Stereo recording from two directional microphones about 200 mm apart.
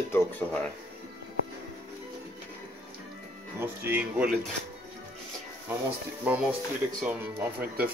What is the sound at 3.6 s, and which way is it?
Speech, 10° right (ahead or behind).